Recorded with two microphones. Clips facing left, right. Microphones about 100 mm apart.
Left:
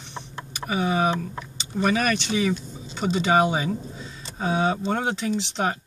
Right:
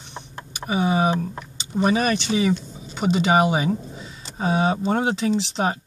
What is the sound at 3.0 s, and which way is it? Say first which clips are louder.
Speech: right 4 dB; 10° right (ahead or behind).